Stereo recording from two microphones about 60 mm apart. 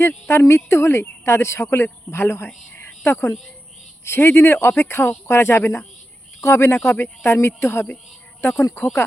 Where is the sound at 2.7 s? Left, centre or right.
Left.